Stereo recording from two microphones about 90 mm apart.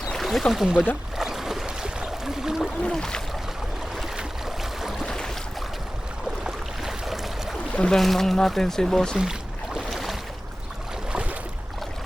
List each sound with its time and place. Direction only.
0.1 s speech: centre (ahead or behind)
1.2 s a sound: 5° right (ahead or behind)
2.8 s speech: 10° left (ahead or behind)
3.9 s a sound: 5° right (ahead or behind)
5.0 s boat: 5° left (ahead or behind)
6.4 s boat: 5° right (ahead or behind)
7.8 s speech: 5° left (ahead or behind)
9.7 s boat: centre (ahead or behind)
11.1 s boat: 15° right (ahead or behind)